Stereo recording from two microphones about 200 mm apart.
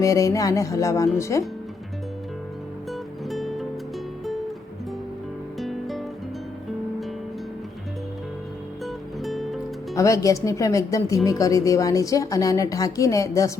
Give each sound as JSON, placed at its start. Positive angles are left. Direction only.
{"t": 0.0, "sound": "a woman's voice", "side_deg": 15}
{"t": 3.2, "sound": "music", "side_deg": 0}
{"t": 5.5, "sound": "music", "side_deg": 0}
{"t": 8.8, "sound": "music", "side_deg": 0}
{"t": 9.9, "sound": "a woman's voice", "side_deg": 15}